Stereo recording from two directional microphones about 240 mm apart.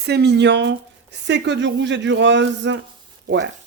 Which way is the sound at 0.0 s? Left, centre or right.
Right.